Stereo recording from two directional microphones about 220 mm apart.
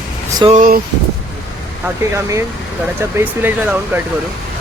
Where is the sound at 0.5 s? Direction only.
40° right (ahead or behind).